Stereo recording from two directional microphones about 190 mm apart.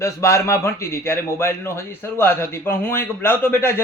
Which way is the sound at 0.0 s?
15° left (ahead or behind).